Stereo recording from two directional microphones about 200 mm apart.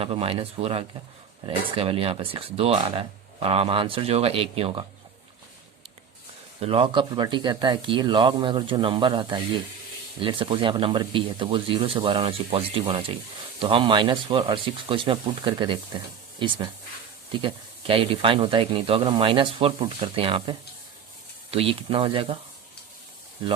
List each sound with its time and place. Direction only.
0.0 s speech: 30° right (ahead or behind)
6.6 s speech: 30° right (ahead or behind)